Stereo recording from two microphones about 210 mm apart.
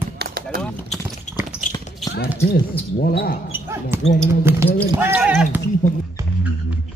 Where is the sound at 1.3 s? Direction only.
35° left (ahead or behind).